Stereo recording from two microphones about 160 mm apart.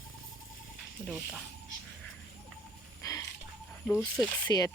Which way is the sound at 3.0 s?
20° left (ahead or behind).